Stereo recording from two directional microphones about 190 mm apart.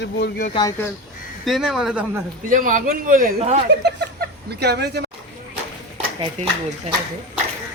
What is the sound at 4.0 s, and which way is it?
Speech, 60° right (ahead or behind).